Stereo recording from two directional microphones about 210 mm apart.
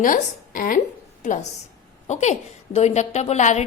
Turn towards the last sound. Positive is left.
turn(degrees=35)  # may be behind; listen again after turning